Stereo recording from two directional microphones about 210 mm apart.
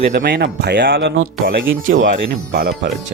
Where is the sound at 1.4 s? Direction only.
40° right (ahead or behind).